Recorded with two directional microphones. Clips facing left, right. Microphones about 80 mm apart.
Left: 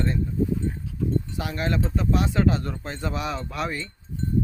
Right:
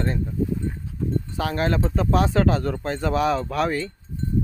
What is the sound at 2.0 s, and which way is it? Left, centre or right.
Speech, right.